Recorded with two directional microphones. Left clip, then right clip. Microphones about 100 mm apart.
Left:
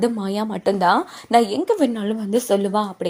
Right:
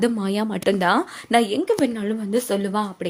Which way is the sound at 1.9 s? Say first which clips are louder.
Left 2 dB; 25° left (ahead or behind).